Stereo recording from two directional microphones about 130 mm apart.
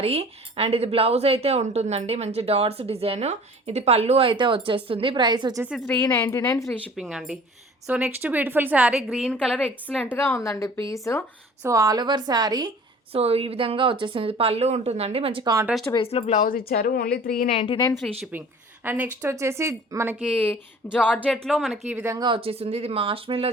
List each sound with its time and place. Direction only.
0.0 s speech: 50° right (ahead or behind); by 5.6 s 30° right (ahead or behind)
5.6 s speech: centre (ahead or behind)
5.9 s a woman's voice: 20° left (ahead or behind)
6.9 s a woman's voice: 5° right (ahead or behind)
9.1 s a woman's voice: 5° left (ahead or behind); by 11.2 s 25° left (ahead or behind)
11.6 s a woman's voice: 25° right (ahead or behind)
13.1 s speech: 50° right (ahead or behind)
16.0 s a woman's voice: 50° left (ahead or behind); by 17.5 s 90° left
17.5 s a woman's voice: 50° left (ahead or behind)
18.3 s a woman's voice: 15° right (ahead or behind)
20.2 s a woman's voice: 10° left (ahead or behind)
21.8 s a woman's voice: 10° right (ahead or behind)
22.1 s speech: 35° right (ahead or behind)